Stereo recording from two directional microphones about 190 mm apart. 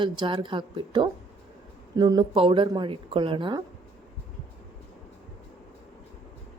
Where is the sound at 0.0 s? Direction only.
25° right (ahead or behind).